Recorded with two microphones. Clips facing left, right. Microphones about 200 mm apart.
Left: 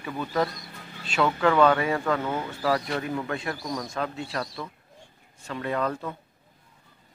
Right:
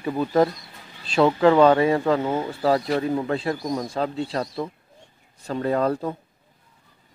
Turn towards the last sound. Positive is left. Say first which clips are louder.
# right 6 dB
turn(degrees=-35)  # may be behind; listen again after turning